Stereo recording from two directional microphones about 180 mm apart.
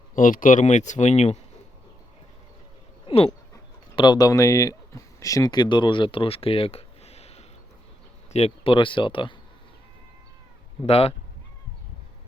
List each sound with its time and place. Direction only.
0.1 s speech: 50° left (ahead or behind)
3.1 s a sound: 30° left (ahead or behind)
3.9 s speech: 25° left (ahead or behind)
10.8 s speech: 35° left (ahead or behind)